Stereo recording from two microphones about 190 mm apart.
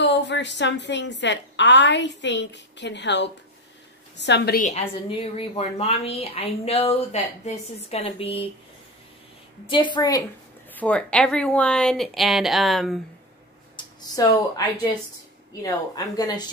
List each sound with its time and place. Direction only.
0.0 s a woman's voice: 65° left (ahead or behind)
4.6 s a woman's voice: 35° left (ahead or behind)
9.7 s speech: 25° left (ahead or behind)
10.7 s speech: 5° left (ahead or behind)
13.8 s a sound: 25° left (ahead or behind)
14.2 s speech: 20° left (ahead or behind)
15.6 s speech: 20° left (ahead or behind)